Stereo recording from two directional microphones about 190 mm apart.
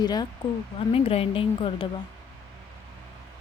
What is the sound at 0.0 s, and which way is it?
Speech, 20° left (ahead or behind).